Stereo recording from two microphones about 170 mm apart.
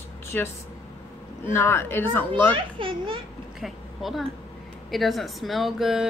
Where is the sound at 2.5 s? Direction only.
30° right (ahead or behind).